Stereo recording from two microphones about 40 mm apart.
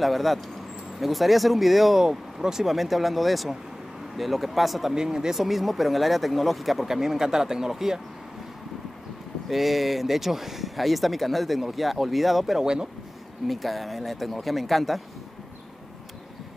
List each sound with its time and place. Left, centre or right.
0.0 s speech: centre
4.9 s speech: centre
7.0 s speech: centre
9.5 s speech: centre
12.5 s speech: centre
13.5 s speech: centre